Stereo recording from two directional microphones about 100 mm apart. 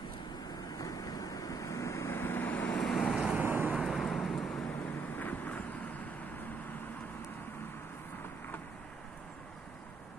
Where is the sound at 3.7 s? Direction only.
Centre (ahead or behind).